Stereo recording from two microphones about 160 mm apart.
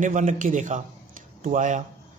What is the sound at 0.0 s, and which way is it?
A man's voice, 50° right (ahead or behind).